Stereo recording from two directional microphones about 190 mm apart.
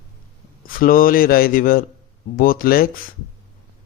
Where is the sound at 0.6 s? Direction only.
50° left (ahead or behind).